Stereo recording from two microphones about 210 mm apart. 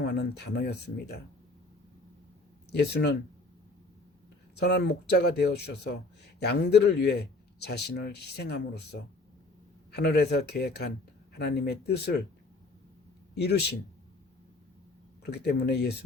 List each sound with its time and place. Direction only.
0.2 s speech: 55° left (ahead or behind)
2.7 s speech: 50° left (ahead or behind)
4.5 s speech: 50° left (ahead or behind)
13.3 s speech: 50° left (ahead or behind)
15.2 s speech: 50° left (ahead or behind)